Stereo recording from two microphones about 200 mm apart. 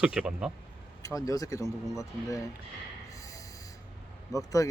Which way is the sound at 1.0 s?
15° left (ahead or behind).